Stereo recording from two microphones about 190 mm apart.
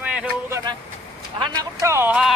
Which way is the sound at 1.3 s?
25° right (ahead or behind).